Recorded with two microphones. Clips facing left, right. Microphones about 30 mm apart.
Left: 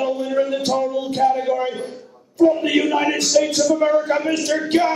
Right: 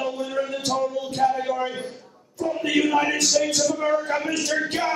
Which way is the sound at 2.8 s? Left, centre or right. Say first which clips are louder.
Left 2 dB; centre.